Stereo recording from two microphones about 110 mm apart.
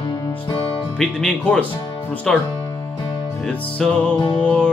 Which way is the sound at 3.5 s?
10° left (ahead or behind).